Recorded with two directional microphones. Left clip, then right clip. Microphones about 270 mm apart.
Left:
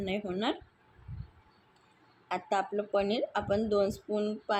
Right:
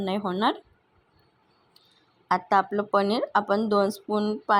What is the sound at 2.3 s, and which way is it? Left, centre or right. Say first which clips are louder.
A woman's voice: right 9 dB; right.